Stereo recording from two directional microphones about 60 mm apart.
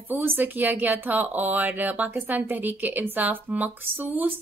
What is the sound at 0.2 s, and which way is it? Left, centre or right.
Speech, right.